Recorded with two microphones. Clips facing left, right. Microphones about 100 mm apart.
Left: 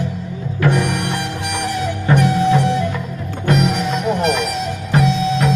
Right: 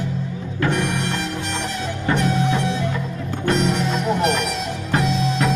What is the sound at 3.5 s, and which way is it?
Music, 5° left (ahead or behind).